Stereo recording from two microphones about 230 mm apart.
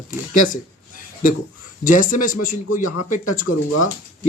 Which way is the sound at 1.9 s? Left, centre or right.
Left.